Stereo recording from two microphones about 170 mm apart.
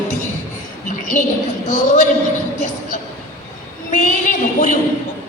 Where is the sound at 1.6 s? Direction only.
45° left (ahead or behind).